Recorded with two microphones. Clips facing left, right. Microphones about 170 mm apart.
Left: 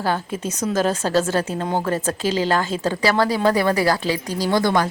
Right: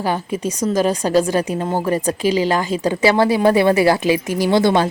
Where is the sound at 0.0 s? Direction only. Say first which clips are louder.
Right 3 dB; 10° right (ahead or behind).